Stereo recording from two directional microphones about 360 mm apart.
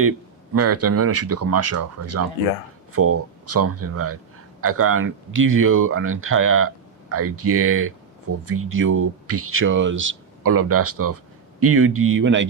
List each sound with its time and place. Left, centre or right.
0.5 s speech: right